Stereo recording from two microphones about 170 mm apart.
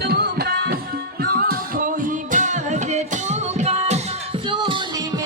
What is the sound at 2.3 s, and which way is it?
Music, 45° right (ahead or behind).